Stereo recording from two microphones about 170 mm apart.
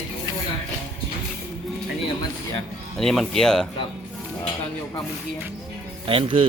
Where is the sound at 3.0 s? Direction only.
Centre (ahead or behind).